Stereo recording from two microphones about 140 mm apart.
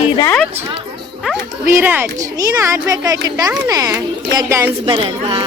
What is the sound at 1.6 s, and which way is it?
A child's voice, 15° right (ahead or behind).